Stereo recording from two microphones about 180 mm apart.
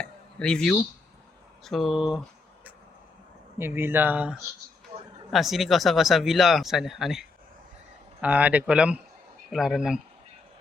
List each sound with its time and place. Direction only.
0.0 s a sound: 5° left (ahead or behind)
1.6 s speech: centre (ahead or behind)
3.6 s speech: 10° right (ahead or behind)